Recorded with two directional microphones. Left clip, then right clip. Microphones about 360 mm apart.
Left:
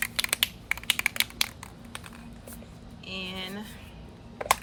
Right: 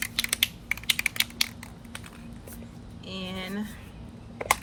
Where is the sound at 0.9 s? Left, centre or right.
Centre.